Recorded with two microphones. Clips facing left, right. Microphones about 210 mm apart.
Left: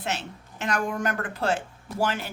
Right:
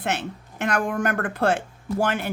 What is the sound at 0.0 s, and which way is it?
Speech, 55° right (ahead or behind).